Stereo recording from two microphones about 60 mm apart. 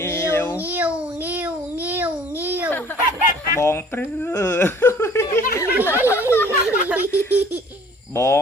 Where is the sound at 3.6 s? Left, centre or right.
Left.